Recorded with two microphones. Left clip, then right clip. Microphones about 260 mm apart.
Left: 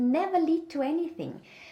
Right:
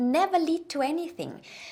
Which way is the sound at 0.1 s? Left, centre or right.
Right.